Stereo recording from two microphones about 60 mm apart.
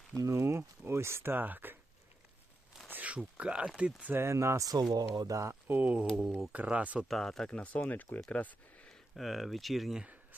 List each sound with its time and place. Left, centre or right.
0.2 s speech: right
1.4 s speech: right
2.9 s a sound: right
3.3 s speech: centre
4.1 s speech: right
4.9 s speech: right
5.6 s speech: right
7.1 s speech: centre
7.5 s speech: left
9.1 s speech: centre